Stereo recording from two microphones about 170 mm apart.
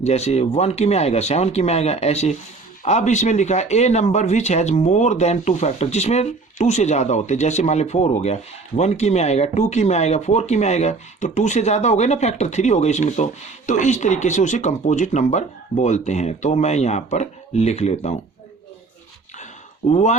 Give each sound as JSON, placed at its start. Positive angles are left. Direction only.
{"t": 0.0, "sound": "speech", "side_deg": 40}
{"t": 19.9, "sound": "speech", "side_deg": 45}